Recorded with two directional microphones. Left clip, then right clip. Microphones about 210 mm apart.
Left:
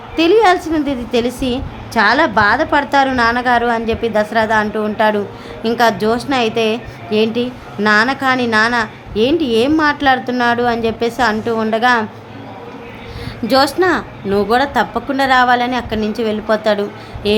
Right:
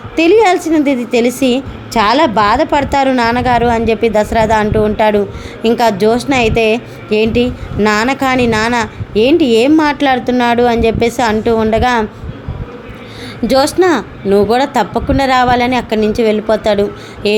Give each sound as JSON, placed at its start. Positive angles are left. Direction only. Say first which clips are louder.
{"t": 0.2, "sound": "a woman's voice", "louder": "right 2 dB", "side_deg": -15}
{"t": 13.5, "sound": "a woman's voice", "louder": "right 2 dB", "side_deg": -15}